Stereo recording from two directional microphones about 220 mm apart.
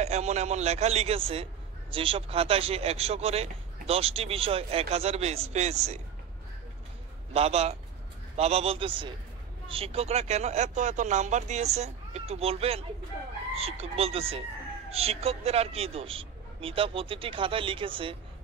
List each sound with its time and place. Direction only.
0.0 s speech: 30° right (ahead or behind)
7.3 s speech: 30° right (ahead or behind)